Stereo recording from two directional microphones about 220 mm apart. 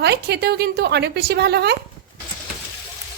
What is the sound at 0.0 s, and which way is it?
A woman's voice, 50° right (ahead or behind).